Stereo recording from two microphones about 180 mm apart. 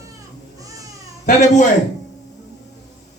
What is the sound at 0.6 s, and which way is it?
Baby cry, 20° right (ahead or behind).